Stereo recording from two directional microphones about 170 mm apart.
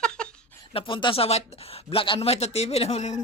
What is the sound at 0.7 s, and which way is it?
Speech, 30° left (ahead or behind).